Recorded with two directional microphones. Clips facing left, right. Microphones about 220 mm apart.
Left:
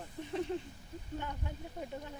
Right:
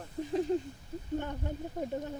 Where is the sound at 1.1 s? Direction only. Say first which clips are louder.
Right 7 dB; 50° right (ahead or behind).